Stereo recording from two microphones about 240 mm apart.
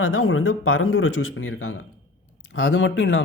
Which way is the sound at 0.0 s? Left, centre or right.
Left.